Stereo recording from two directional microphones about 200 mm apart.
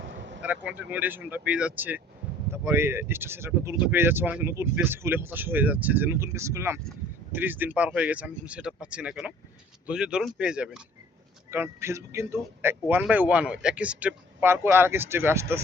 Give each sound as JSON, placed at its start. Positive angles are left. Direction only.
{"t": 0.0, "sound": "vehicle", "side_deg": -65}
{"t": 0.4, "sound": "speech", "side_deg": -5}